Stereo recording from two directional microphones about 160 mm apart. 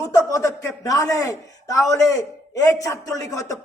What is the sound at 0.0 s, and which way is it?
Speech, 20° left (ahead or behind).